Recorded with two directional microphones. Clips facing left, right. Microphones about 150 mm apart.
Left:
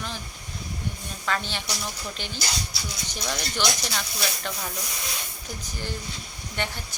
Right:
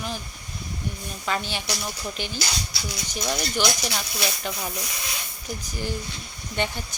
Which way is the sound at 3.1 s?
10° right (ahead or behind).